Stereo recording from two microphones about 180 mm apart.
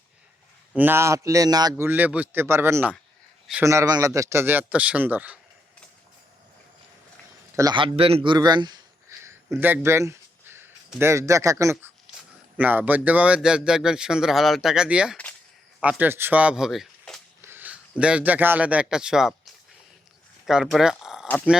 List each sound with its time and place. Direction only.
0.7 s a man's voice: 10° right (ahead or behind)
1.8 s a man's voice: 10° right (ahead or behind)
7.5 s a man's voice: 20° right (ahead or behind); by 17.2 s centre (ahead or behind)
17.4 s a sound: 10° right (ahead or behind)
18.0 s a man's voice: 5° right (ahead or behind)
20.5 s speech: centre (ahead or behind)